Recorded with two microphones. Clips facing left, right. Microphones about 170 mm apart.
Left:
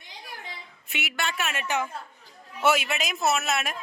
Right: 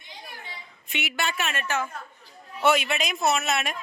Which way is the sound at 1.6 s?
15° left (ahead or behind).